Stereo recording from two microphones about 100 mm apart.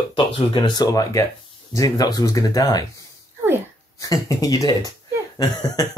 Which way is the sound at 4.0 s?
40° left (ahead or behind).